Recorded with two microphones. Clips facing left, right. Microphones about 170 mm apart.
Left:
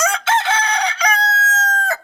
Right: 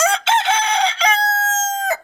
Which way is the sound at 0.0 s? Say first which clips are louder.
Right 1 dB; 25° right (ahead or behind).